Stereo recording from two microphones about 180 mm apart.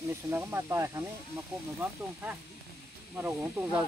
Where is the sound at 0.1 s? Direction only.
15° right (ahead or behind).